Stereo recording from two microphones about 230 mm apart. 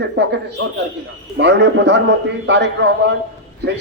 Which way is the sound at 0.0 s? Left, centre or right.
Right.